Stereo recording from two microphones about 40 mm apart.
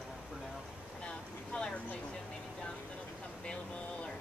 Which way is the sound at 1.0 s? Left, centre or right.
Left.